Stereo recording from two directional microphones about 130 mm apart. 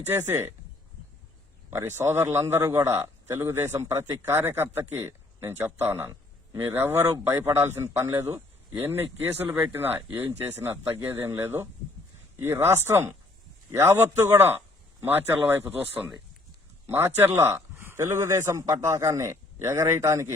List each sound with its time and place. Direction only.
0.1 s speech: 20° right (ahead or behind)
1.7 s speech: 20° right (ahead or behind)